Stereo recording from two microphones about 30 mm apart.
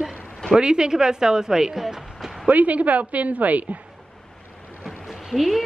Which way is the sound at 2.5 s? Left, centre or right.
Right.